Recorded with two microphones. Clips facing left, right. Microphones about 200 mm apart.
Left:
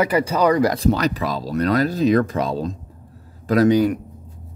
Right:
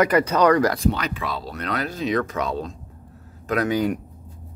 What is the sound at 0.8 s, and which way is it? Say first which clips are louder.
Speech: left 5 dB; 40° left (ahead or behind).